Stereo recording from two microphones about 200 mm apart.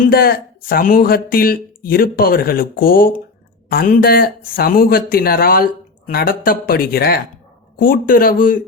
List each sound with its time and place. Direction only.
0.0 s speech: 50° left (ahead or behind)